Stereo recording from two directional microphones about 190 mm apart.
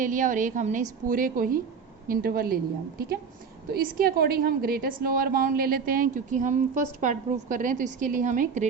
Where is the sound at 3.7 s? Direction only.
50° right (ahead or behind).